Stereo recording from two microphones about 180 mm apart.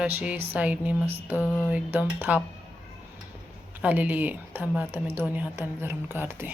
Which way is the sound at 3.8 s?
10° right (ahead or behind).